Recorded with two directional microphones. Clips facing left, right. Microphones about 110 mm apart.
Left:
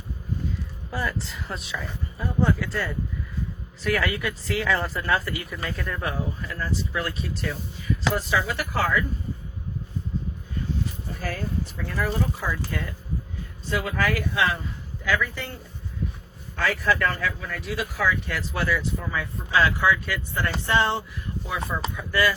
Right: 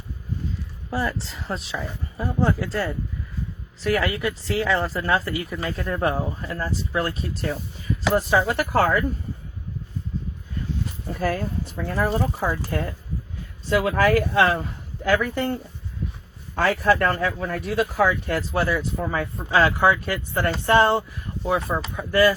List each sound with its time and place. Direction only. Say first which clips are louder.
0.9 s speech: right 3 dB; 30° right (ahead or behind); by 9.0 s 50° right (ahead or behind)
11.2 s speech: right 5 dB; 40° right (ahead or behind)
13.7 s speech: right 6 dB; 55° right (ahead or behind)
16.8 s speech: right 4 dB; 45° right (ahead or behind)